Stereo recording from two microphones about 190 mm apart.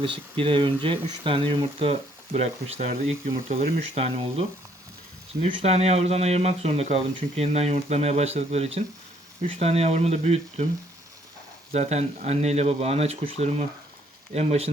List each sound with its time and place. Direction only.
0.0 s speech: 25° right (ahead or behind)
11.7 s speech: 35° right (ahead or behind)